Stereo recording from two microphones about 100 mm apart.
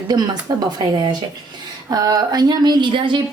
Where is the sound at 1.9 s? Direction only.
40° right (ahead or behind).